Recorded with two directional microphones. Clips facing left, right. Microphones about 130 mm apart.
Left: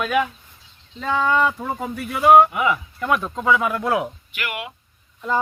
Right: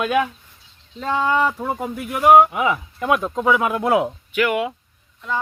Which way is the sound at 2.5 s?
35° right (ahead or behind).